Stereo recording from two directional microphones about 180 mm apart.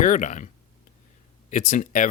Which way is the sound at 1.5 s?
45° left (ahead or behind).